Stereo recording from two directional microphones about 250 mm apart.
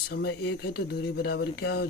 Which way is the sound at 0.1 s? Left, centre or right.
Left.